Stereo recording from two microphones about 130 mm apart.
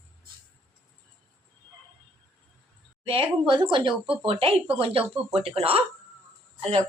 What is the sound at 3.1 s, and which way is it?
Speech, 45° right (ahead or behind).